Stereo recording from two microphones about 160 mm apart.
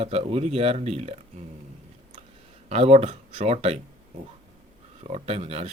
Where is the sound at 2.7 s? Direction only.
40° right (ahead or behind).